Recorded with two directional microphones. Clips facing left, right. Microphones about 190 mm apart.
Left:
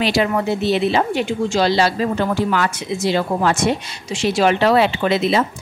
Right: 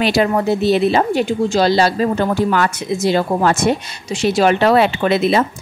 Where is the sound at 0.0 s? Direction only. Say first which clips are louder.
Right 3 dB; 45° right (ahead or behind).